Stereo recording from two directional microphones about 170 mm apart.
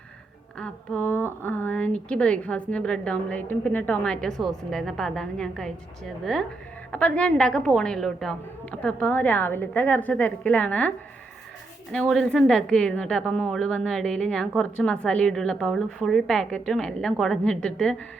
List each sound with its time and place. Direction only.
0.6 s a woman's voice: 10° left (ahead or behind)